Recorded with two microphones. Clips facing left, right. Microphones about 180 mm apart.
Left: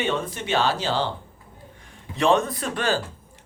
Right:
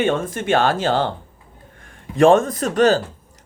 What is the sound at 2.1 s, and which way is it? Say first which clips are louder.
Speech: right 7 dB; 50° right (ahead or behind).